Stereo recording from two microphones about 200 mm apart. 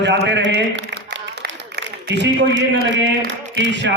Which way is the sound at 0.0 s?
60° right (ahead or behind).